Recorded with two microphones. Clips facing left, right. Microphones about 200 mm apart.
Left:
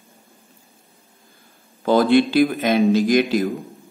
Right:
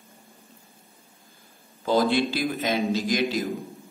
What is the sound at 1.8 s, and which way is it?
A man's voice, 60° left (ahead or behind).